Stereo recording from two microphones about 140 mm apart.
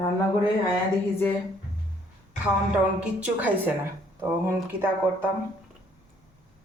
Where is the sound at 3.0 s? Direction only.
10° right (ahead or behind).